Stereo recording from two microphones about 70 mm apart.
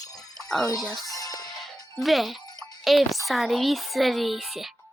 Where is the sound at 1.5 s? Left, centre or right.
Centre.